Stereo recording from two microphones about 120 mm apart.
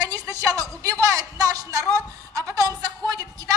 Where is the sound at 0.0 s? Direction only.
30° right (ahead or behind).